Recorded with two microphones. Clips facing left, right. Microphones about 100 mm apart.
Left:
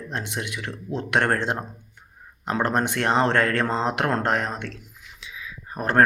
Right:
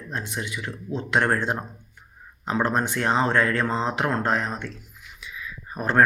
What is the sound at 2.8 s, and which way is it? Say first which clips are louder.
Speech: left 1 dB; 65° left (ahead or behind).